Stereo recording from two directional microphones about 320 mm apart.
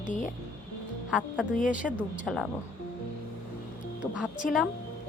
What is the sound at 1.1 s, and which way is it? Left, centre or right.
Speech, centre.